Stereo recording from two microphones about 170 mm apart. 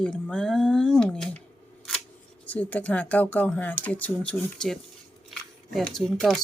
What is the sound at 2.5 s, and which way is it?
Speech, 10° left (ahead or behind).